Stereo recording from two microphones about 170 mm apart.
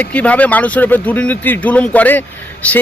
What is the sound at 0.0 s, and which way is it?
Speech, 10° left (ahead or behind).